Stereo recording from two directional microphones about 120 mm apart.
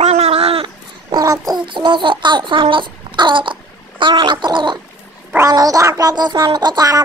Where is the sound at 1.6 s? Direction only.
40° right (ahead or behind).